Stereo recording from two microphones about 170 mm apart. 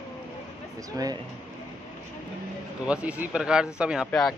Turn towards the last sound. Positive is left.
turn(degrees=-5)  # may be behind; listen again after turning